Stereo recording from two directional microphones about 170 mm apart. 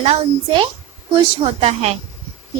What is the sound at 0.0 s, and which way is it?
A woman's voice, 35° right (ahead or behind).